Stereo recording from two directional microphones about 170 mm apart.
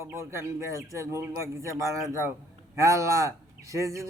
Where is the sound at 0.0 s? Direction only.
15° right (ahead or behind).